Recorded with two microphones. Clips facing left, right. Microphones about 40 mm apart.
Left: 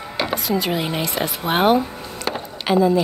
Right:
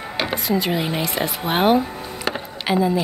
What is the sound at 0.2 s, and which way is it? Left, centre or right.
A woman's voice, centre.